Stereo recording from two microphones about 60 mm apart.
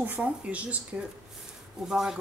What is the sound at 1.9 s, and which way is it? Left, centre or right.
Speech, centre.